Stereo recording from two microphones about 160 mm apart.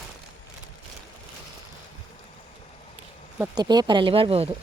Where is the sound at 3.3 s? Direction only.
10° right (ahead or behind).